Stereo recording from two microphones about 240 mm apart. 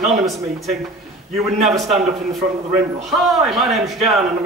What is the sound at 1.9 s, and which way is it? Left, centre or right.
Speech, right.